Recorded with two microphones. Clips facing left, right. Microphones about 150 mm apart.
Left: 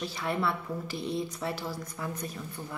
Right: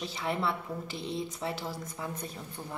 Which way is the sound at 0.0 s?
20° right (ahead or behind).